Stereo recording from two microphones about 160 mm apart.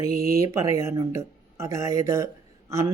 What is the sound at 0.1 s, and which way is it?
Speech, 70° right (ahead or behind).